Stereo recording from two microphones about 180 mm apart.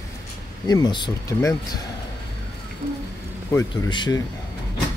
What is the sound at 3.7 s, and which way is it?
Speech, 25° left (ahead or behind).